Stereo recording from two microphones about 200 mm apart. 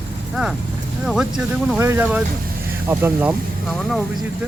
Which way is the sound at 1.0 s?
Centre (ahead or behind).